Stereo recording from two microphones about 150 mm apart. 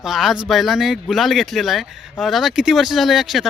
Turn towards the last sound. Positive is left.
turn(degrees=0)  # may be behind; listen again after turning